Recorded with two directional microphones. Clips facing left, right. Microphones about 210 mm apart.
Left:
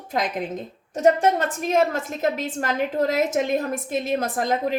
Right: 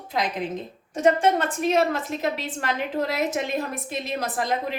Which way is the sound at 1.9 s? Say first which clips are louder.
Left 2 dB; 45° left (ahead or behind).